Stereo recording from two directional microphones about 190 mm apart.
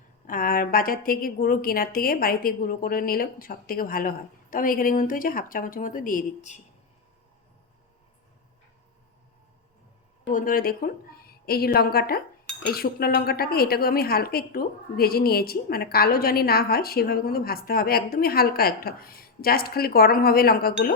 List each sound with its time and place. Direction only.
0.3 s a woman's voice: 50° left (ahead or behind)
10.2 s a woman's voice: 45° left (ahead or behind)